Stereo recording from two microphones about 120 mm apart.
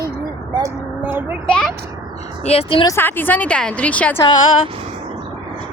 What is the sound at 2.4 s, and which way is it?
Speech, 55° left (ahead or behind).